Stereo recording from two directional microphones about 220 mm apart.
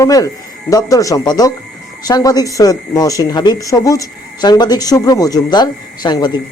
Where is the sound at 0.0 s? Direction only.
15° left (ahead or behind).